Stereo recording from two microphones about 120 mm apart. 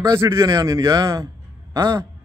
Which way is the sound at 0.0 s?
25° right (ahead or behind).